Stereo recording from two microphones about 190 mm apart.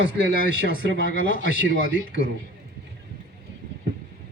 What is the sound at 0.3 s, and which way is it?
Speech, 90° left.